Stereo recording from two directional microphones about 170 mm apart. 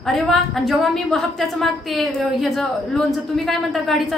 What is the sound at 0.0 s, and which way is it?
A woman's voice, centre (ahead or behind).